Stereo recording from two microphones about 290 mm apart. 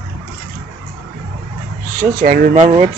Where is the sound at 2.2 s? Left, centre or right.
Right.